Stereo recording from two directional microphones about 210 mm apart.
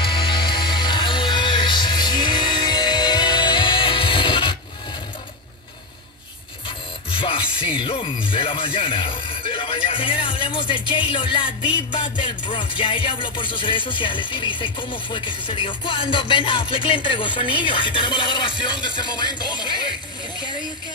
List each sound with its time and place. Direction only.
0.0 s music: 25° left (ahead or behind)
7.1 s music: 25° left (ahead or behind)
8.3 s speech: 25° left (ahead or behind)